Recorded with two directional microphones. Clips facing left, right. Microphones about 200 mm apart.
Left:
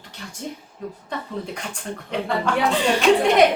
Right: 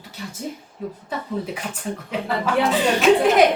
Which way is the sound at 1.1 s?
5° right (ahead or behind).